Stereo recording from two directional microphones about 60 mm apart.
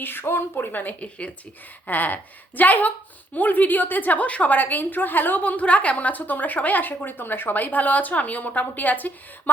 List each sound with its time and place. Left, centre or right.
0.0 s a woman's voice: left